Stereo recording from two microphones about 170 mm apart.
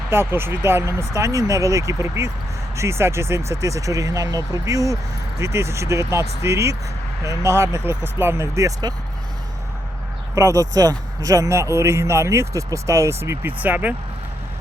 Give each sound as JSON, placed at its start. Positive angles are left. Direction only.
{"t": 0.1, "sound": "speech", "side_deg": -15}
{"t": 10.3, "sound": "speech", "side_deg": -20}